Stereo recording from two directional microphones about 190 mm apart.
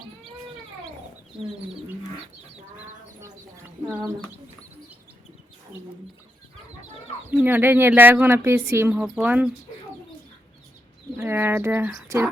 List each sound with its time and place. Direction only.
1.4 s speech: 5° right (ahead or behind)
3.6 s speech: 10° right (ahead or behind)
7.3 s speech: 10° right (ahead or behind)
11.2 s speech: 10° right (ahead or behind)